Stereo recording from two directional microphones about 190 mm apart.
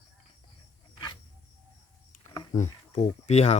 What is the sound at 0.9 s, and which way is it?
Cricket, 25° left (ahead or behind).